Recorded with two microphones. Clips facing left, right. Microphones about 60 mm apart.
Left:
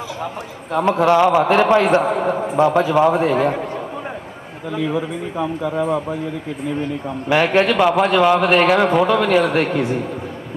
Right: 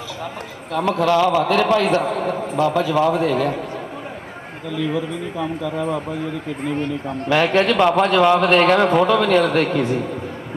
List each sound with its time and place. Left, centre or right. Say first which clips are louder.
0.7 s a man's voice: left 3 dB; left
4.7 s a man's voice: left 1 dB; left
7.3 s speech: left 1 dB; centre